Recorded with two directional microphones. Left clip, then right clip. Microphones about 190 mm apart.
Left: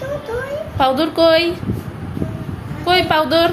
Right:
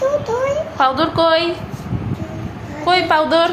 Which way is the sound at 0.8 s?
30° left (ahead or behind).